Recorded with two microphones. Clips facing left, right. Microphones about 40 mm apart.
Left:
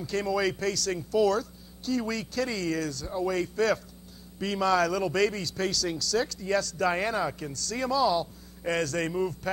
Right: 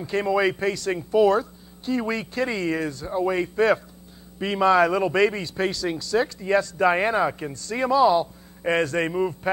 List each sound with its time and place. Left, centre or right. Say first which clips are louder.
0.0 s speech: right 6 dB; right